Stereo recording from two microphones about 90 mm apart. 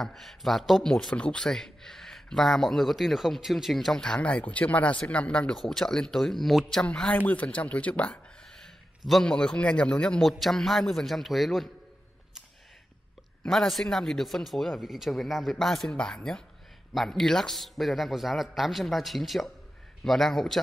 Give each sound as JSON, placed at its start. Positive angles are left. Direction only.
{"t": 0.0, "sound": "a man's voice", "side_deg": 0}
{"t": 13.5, "sound": "a man's voice", "side_deg": 0}